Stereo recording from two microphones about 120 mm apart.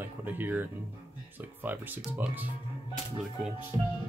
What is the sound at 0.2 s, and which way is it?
Speech, 15° right (ahead or behind).